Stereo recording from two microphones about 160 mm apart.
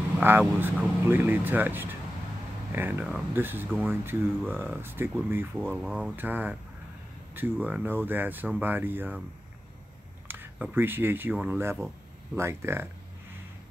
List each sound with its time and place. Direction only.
0.2 s speech: 15° right (ahead or behind)
10.2 s speech: 15° right (ahead or behind)